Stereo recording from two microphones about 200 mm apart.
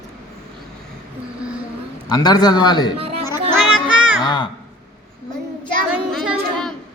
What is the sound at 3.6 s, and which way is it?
Music, 5° right (ahead or behind).